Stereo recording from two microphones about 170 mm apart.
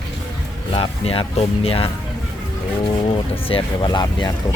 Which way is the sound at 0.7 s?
35° left (ahead or behind).